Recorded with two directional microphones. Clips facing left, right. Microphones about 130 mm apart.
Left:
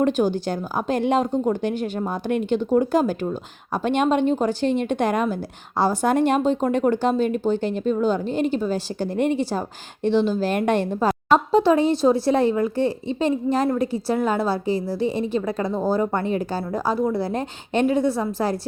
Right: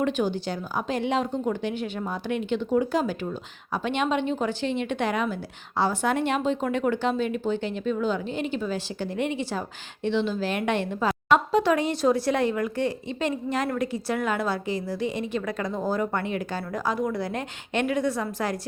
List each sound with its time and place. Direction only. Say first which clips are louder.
0.0 s a woman's voice: left 5 dB; 45° left (ahead or behind)